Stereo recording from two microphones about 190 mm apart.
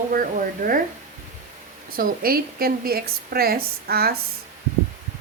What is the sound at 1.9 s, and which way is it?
A woman's voice, 50° right (ahead or behind).